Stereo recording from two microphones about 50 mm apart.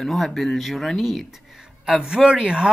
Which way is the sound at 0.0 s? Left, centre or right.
Centre.